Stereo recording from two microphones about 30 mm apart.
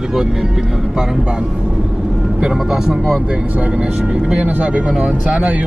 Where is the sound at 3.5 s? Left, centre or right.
Right.